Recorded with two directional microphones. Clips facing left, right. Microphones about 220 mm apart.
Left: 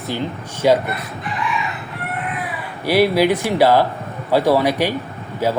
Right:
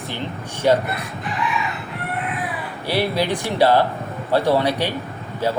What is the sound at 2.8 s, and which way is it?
Speech, 10° left (ahead or behind).